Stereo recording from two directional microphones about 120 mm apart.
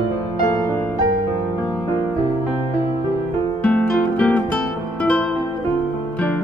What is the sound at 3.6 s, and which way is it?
Guitar, 10° left (ahead or behind).